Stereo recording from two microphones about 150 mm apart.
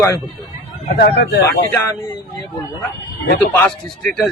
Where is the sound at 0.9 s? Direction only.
90° left.